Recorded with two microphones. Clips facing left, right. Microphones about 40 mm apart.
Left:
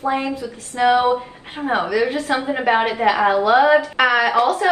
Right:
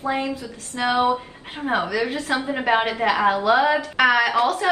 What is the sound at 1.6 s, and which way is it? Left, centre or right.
A woman's voice, centre.